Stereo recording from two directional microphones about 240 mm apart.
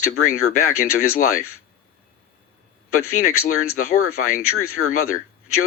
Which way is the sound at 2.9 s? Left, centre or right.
Left.